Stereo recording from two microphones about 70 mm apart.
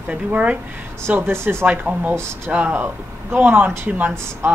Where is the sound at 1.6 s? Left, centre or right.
Right.